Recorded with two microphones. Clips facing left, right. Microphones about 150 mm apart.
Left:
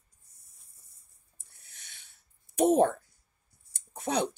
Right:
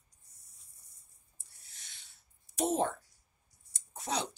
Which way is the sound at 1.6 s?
60° left (ahead or behind).